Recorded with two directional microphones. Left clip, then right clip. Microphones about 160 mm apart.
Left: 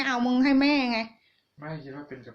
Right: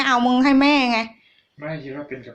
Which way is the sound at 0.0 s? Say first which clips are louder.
Right 8 dB; 20° left (ahead or behind).